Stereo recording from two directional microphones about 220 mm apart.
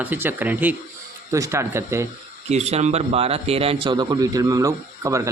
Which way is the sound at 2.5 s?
30° right (ahead or behind).